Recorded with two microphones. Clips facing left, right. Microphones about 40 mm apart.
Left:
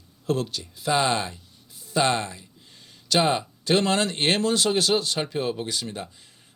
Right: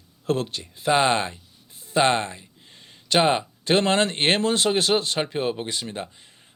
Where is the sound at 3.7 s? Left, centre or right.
Right.